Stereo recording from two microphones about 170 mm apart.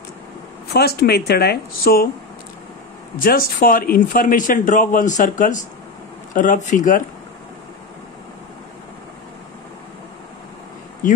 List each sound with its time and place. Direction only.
0.7 s speech: 70° left (ahead or behind)
3.2 s a man's voice: 55° left (ahead or behind)
11.0 s speech: 50° left (ahead or behind)